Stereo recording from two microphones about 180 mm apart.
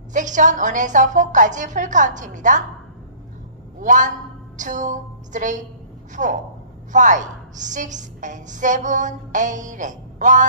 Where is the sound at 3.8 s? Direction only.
45° right (ahead or behind).